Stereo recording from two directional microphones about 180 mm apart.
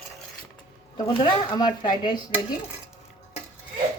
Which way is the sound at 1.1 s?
30° left (ahead or behind).